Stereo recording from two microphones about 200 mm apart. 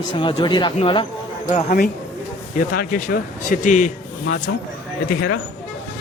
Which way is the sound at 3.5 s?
40° left (ahead or behind).